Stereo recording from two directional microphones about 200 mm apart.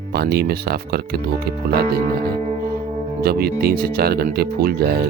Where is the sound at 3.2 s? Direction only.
50° right (ahead or behind).